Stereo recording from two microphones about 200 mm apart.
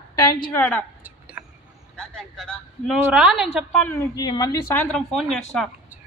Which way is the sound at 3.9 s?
20° left (ahead or behind).